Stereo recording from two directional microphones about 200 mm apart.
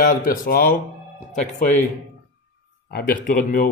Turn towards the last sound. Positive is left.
turn(degrees=45)  # may be behind; listen again after turning